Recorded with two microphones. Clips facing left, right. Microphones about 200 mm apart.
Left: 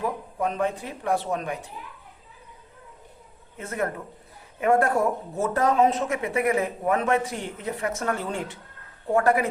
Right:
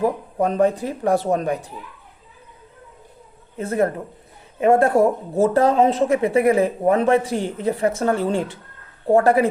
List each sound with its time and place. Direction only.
0.0 s a woman's voice: 35° right (ahead or behind)
3.6 s a woman's voice: 35° right (ahead or behind)